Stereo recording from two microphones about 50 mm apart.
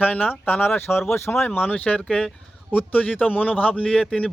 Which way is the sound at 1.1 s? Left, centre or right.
Left.